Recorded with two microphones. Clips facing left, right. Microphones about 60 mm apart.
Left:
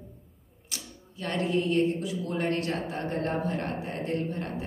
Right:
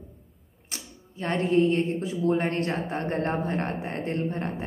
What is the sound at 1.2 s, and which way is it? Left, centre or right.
Speech, right.